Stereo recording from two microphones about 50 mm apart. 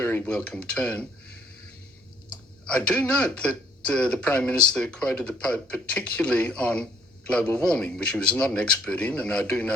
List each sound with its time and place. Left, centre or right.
0.0 s speech: left
2.3 s a sound: left
3.3 s speech: left